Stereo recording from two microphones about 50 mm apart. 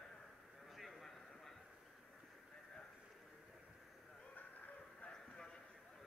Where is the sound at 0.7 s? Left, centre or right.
Centre.